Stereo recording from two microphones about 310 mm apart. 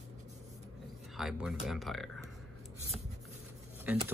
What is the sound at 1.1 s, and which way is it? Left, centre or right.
Speech, centre.